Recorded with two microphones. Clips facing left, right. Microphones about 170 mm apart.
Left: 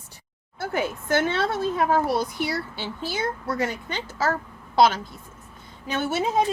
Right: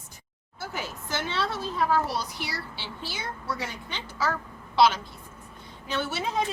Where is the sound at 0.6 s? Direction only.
55° left (ahead or behind).